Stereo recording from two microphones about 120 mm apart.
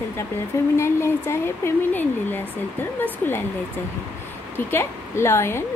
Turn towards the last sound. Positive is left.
turn(degrees=20)  # may be behind; listen again after turning